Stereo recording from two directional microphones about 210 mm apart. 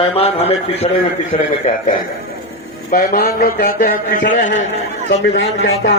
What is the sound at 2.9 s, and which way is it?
A man's voice, 45° left (ahead or behind).